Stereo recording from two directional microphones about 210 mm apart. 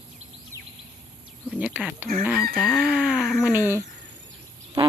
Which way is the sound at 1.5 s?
5° right (ahead or behind).